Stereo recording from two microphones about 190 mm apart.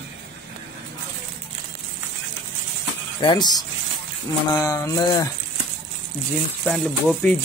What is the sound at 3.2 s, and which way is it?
Speech, 25° left (ahead or behind).